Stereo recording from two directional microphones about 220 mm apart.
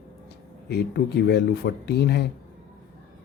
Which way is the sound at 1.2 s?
50° left (ahead or behind).